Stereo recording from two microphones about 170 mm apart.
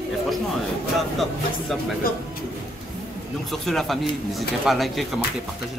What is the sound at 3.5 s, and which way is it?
Speech, centre (ahead or behind).